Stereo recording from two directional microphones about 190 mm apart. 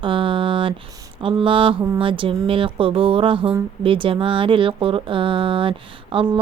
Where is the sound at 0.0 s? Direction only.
25° right (ahead or behind).